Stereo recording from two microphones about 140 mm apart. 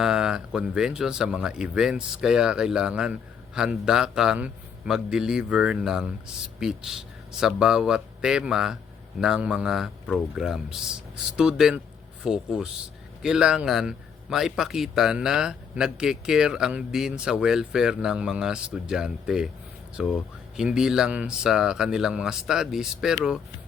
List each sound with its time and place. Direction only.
0.0 s speech: 5° right (ahead or behind)